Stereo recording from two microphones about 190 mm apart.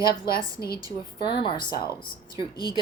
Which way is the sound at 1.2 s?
25° left (ahead or behind).